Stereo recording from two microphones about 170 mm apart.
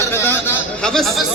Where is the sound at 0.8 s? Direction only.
Centre (ahead or behind).